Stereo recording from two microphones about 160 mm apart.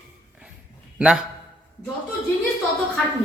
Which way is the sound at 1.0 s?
5° right (ahead or behind).